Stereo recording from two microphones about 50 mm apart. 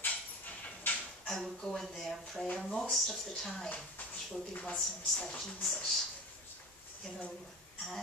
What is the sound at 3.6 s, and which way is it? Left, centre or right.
Speech, left.